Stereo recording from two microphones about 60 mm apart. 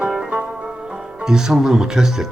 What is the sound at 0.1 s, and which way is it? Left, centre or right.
Music, centre.